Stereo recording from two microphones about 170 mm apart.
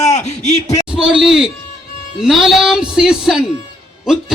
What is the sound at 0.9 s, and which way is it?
A man's voice, 5° right (ahead or behind).